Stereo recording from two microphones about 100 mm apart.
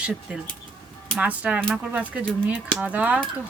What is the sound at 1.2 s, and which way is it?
Speech, 10° right (ahead or behind).